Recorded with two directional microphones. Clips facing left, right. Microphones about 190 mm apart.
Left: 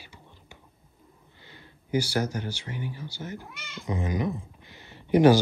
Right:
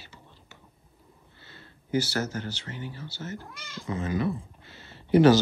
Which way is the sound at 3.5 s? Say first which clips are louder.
Even; centre (ahead or behind).